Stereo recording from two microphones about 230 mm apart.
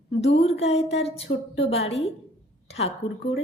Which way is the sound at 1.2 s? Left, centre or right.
Left.